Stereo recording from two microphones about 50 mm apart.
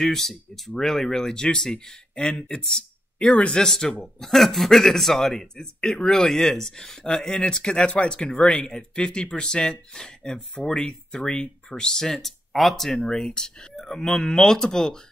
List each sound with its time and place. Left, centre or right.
0.0 s speech: centre
3.2 s speech: left
3.6 s speech: centre